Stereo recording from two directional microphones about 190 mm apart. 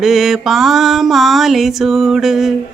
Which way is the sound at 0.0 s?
Centre (ahead or behind).